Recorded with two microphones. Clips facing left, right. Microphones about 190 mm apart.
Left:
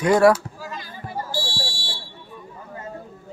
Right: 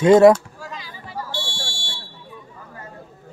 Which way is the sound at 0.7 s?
50° left (ahead or behind).